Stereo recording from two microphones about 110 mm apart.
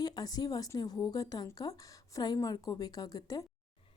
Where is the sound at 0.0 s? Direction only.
35° left (ahead or behind).